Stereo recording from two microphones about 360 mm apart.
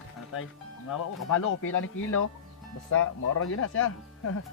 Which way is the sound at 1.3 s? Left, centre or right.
Left.